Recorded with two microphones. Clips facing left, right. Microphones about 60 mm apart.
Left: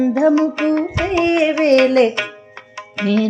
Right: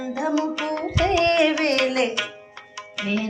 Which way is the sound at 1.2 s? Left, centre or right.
Centre.